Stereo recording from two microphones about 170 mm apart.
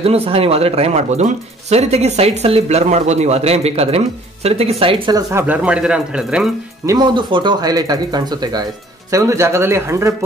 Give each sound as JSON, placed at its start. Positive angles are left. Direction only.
{"t": 0.0, "sound": "speech", "side_deg": -35}
{"t": 5.1, "sound": "speech", "side_deg": -15}
{"t": 6.9, "sound": "speech", "side_deg": -25}